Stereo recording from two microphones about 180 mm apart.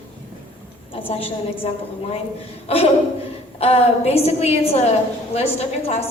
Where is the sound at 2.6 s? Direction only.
35° left (ahead or behind).